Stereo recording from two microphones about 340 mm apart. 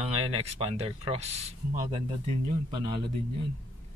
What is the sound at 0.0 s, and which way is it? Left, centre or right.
Speech, centre.